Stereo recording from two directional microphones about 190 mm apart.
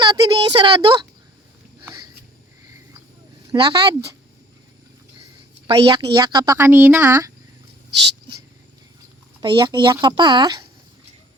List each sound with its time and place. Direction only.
0.0 s a sound: 20° right (ahead or behind)
3.5 s speech: 25° right (ahead or behind)
5.6 s speech: 25° right (ahead or behind)
9.4 s speech: 25° right (ahead or behind)